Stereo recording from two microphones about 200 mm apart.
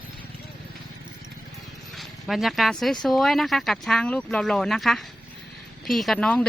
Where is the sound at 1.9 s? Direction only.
Centre (ahead or behind).